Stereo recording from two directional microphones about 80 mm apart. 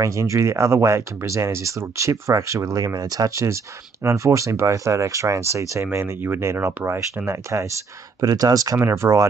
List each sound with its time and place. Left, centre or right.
0.0 s speech: right
8.2 s speech: right
8.7 s speech: right